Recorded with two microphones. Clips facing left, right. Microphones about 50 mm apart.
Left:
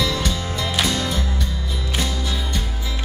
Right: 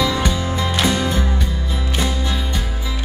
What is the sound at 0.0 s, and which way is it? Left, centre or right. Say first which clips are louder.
Music: right 4 dB; centre.